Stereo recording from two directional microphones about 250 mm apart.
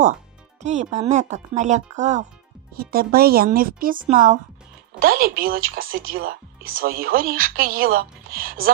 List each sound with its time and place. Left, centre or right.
0.6 s speech: right